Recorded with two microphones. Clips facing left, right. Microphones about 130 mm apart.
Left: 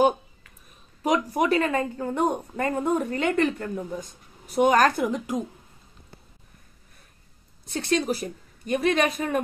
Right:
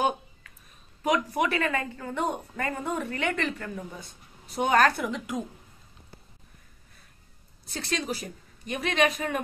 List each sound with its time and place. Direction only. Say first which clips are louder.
1.0 s a woman's voice: left 3 dB; 40° left (ahead or behind)
7.9 s speech: left 7 dB; 45° left (ahead or behind)